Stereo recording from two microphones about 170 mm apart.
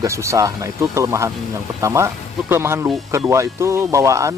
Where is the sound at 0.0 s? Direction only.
15° right (ahead or behind).